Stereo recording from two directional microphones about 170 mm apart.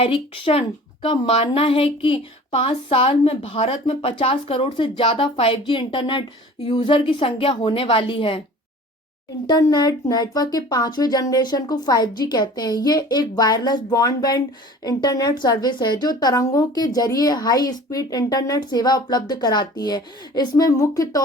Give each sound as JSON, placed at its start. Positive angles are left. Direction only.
{"t": 0.0, "sound": "speech", "side_deg": 30}
{"t": 9.5, "sound": "a woman's voice", "side_deg": 25}